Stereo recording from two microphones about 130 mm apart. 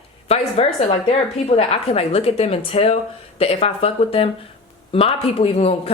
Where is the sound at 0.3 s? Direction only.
50° left (ahead or behind).